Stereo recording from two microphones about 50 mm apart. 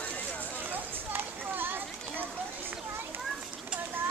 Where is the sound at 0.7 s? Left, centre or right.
Right.